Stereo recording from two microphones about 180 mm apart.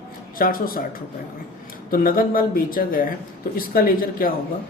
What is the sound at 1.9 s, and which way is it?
A man's voice, 50° left (ahead or behind).